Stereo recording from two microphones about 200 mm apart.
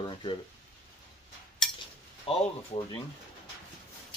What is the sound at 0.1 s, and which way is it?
Speech, 25° left (ahead or behind).